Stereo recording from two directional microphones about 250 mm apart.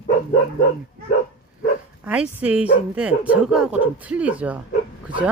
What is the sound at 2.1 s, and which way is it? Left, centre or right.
Speech, centre.